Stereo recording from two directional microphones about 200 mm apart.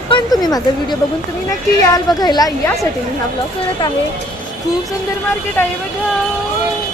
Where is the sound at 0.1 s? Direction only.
20° left (ahead or behind).